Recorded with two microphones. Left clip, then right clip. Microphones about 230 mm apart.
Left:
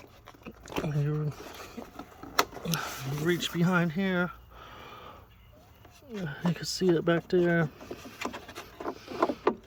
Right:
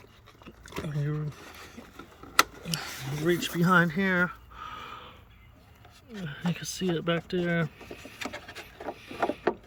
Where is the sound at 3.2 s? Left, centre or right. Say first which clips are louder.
Right 2 dB; centre.